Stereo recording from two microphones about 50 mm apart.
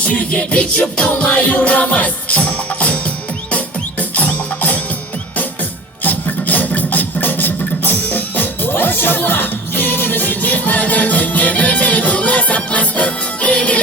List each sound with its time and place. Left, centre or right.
0.0 s music: left
4.1 s music: left
6.0 s beatboxing: left